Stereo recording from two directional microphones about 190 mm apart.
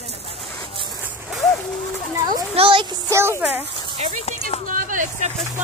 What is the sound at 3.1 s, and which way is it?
Speech, 15° right (ahead or behind).